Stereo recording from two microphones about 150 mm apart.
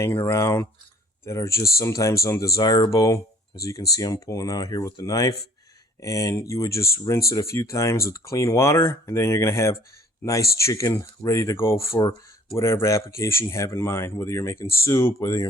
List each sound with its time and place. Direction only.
0.0 s speech: 20° left (ahead or behind)